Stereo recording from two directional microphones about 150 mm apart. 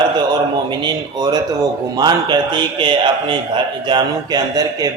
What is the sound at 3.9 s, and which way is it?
A man's voice, 25° right (ahead or behind).